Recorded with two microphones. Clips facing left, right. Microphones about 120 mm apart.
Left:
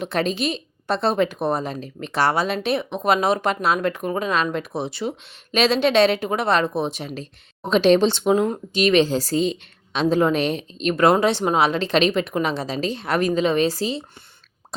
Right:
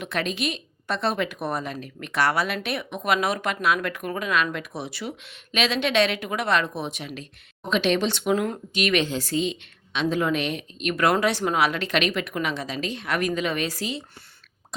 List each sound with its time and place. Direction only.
0.0 s speech: 35° left (ahead or behind)